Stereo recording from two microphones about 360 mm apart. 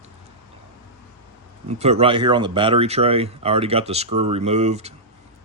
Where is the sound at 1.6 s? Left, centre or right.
Centre.